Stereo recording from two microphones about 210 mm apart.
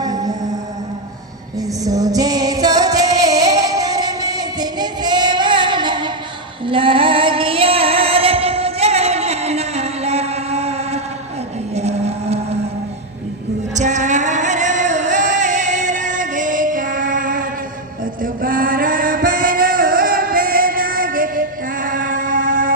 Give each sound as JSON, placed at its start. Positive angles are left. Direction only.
{"t": 0.0, "sound": "music", "side_deg": -20}
{"t": 1.5, "sound": "music", "side_deg": -15}
{"t": 6.7, "sound": "female singing", "side_deg": -25}
{"t": 11.7, "sound": "music", "side_deg": -30}
{"t": 13.7, "sound": "music", "side_deg": -35}
{"t": 18.2, "sound": "chant", "side_deg": -40}